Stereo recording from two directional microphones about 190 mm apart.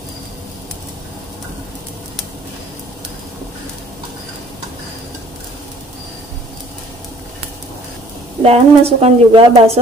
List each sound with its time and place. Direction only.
8.4 s a woman's voice: 30° right (ahead or behind)